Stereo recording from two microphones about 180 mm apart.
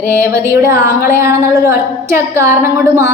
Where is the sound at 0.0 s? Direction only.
15° right (ahead or behind).